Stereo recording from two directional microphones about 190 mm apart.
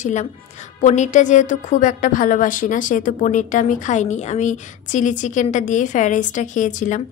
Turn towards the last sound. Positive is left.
turn(degrees=40)  # may be behind; listen again after turning